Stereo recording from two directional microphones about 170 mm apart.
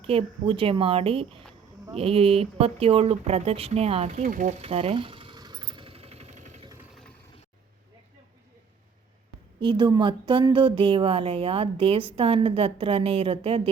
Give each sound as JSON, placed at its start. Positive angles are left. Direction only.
{"t": 0.0, "sound": "a woman's voice", "side_deg": -35}
{"t": 4.3, "sound": "speech", "side_deg": -50}
{"t": 4.6, "sound": "a sound", "side_deg": -35}
{"t": 9.6, "sound": "a woman's voice", "side_deg": -30}